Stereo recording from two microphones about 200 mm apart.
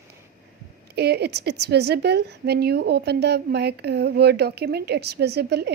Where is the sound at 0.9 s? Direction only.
55° right (ahead or behind).